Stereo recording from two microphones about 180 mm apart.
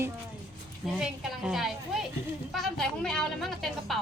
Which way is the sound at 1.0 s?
5° right (ahead or behind).